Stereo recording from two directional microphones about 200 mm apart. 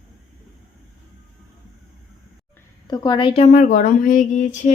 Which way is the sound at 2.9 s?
20° left (ahead or behind).